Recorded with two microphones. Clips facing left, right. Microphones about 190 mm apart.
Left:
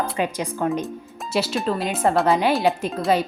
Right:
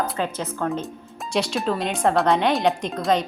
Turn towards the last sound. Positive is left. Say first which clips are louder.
# left 1 dB
turn(degrees=5)  # may be behind; listen again after turning